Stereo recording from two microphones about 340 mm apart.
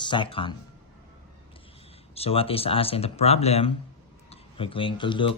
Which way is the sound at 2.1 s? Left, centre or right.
Centre.